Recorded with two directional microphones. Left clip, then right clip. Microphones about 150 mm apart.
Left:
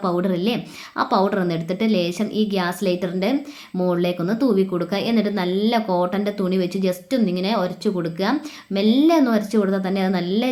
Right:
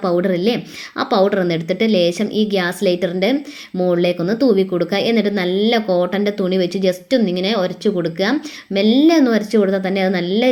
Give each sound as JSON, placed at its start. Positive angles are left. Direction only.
{"t": 0.0, "sound": "speech", "side_deg": -15}